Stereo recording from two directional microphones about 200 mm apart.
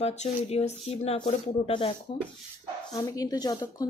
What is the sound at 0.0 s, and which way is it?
Speech, 35° left (ahead or behind).